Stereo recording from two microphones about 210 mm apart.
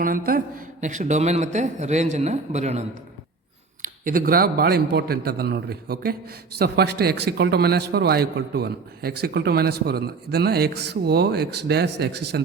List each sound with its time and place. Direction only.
0.0 s a man's voice: 45° right (ahead or behind)